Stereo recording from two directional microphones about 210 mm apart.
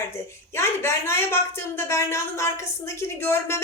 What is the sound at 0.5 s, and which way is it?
Speech, 10° left (ahead or behind).